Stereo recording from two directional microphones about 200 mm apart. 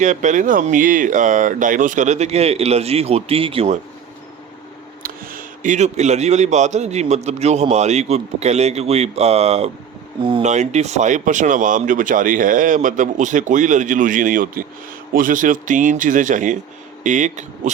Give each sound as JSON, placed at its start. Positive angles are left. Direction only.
{"t": 0.0, "sound": "a man's voice", "side_deg": -40}
{"t": 5.0, "sound": "a man's voice", "side_deg": -45}